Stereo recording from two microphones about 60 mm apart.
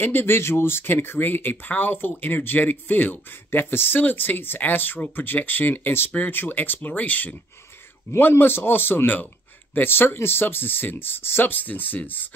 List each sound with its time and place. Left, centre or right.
0.0 s speech: left